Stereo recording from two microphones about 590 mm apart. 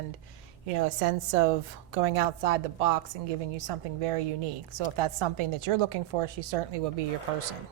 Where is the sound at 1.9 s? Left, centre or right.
Right.